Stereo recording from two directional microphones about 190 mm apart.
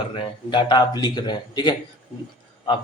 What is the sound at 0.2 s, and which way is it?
Speech, 25° left (ahead or behind).